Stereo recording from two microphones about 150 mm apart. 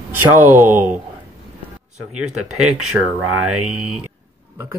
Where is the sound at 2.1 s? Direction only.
5° right (ahead or behind).